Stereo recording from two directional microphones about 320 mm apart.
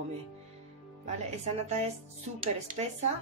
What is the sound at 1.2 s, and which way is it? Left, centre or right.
Speech, centre.